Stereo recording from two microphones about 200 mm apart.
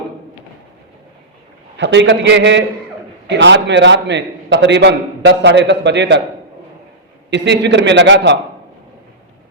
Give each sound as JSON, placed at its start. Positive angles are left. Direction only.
{"t": 1.7, "sound": "a man's voice", "side_deg": -65}
{"t": 7.3, "sound": "a man's voice", "side_deg": -60}